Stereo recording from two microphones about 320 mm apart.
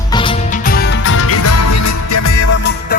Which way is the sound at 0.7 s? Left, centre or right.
Left.